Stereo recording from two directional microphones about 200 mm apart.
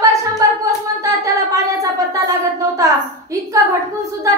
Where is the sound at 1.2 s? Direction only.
15° right (ahead or behind).